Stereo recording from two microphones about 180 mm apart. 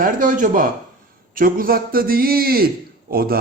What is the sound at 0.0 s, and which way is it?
Speech, 50° right (ahead or behind).